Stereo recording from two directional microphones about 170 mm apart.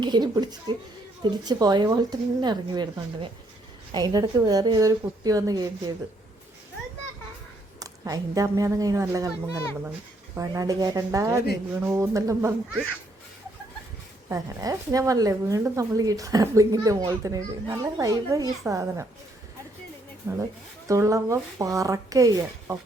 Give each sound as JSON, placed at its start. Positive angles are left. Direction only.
{"t": 0.0, "sound": "speech", "side_deg": -25}
{"t": 7.8, "sound": "speech", "side_deg": -20}
{"t": 10.3, "sound": "speech", "side_deg": -20}
{"t": 14.3, "sound": "speech", "side_deg": -20}
{"t": 20.2, "sound": "speech", "side_deg": -15}